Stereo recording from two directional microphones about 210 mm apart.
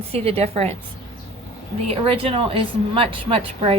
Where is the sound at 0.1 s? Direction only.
30° right (ahead or behind).